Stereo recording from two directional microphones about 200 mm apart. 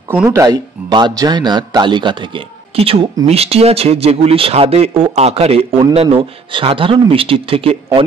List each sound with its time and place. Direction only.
0.1 s a man's voice: 10° right (ahead or behind); by 8.0 s 25° right (ahead or behind)